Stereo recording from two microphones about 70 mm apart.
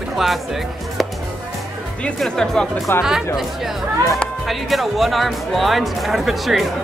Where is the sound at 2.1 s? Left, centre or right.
Centre.